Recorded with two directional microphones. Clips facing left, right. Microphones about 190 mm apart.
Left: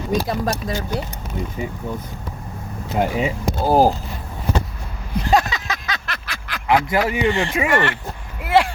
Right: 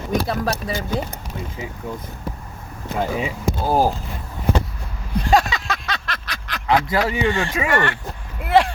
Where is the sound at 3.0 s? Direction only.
20° left (ahead or behind).